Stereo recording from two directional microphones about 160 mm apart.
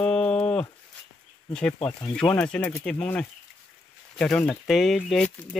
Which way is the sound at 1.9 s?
30° left (ahead or behind).